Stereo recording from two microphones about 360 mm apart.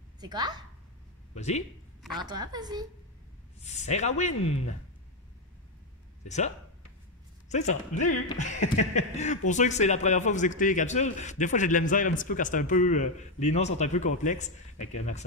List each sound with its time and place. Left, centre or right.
0.2 s a woman's voice: centre
1.3 s speech: centre
2.1 s a woman's voice: centre
3.6 s a man's voice: centre
6.2 s a man's voice: centre